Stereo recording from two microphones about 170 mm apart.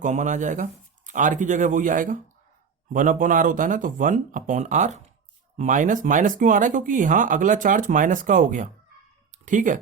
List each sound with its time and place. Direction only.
0.0 s speech: 45° right (ahead or behind)